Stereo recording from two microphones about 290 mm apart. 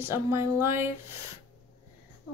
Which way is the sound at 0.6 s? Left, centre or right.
Centre.